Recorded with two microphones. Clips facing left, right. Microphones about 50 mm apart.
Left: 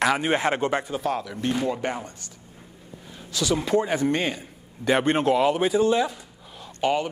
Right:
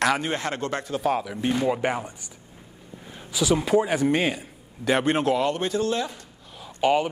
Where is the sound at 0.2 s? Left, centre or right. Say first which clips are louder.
Left 5 dB; centre.